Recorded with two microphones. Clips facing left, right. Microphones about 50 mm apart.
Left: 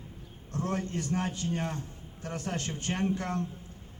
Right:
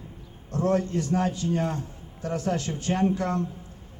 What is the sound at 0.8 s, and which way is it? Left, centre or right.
Speech, left.